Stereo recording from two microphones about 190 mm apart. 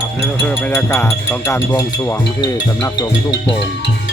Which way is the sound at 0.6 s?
10° left (ahead or behind).